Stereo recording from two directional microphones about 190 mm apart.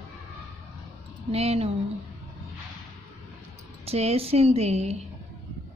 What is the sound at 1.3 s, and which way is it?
Speech, 30° right (ahead or behind).